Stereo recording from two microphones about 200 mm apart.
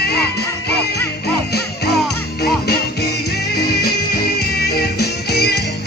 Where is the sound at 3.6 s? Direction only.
50° left (ahead or behind).